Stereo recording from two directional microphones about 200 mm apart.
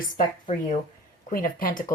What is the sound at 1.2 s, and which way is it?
Speech, 45° left (ahead or behind).